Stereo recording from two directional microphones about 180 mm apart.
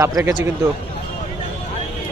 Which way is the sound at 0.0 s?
20° right (ahead or behind).